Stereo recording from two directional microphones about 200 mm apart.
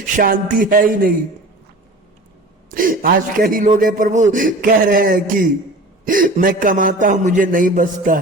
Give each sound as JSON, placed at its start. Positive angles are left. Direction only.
{"t": 0.2, "sound": "a man's voice", "side_deg": -45}
{"t": 2.6, "sound": "a man's voice", "side_deg": -45}